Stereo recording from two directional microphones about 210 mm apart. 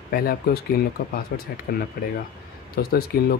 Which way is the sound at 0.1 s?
45° left (ahead or behind).